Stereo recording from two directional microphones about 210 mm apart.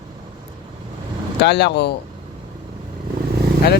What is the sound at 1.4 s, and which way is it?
Speech, 55° left (ahead or behind).